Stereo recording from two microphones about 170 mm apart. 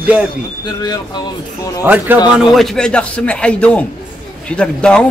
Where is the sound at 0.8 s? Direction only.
25° left (ahead or behind).